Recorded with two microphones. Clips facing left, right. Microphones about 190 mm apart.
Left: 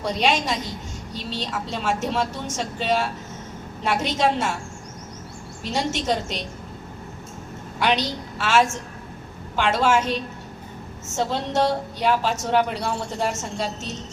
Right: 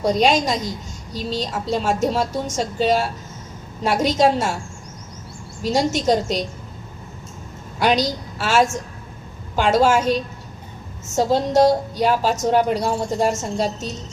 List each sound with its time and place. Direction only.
0.0 s speech: 40° right (ahead or behind)
5.6 s speech: 40° right (ahead or behind)
7.8 s a woman's voice: 40° right (ahead or behind)